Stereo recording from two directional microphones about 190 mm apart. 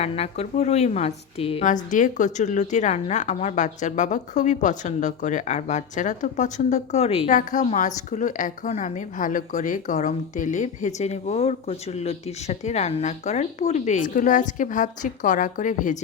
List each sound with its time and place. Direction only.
0.0 s a woman's voice: 35° left (ahead or behind)